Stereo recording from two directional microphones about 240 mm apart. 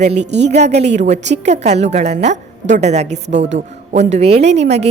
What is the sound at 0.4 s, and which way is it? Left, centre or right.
A woman's voice, right.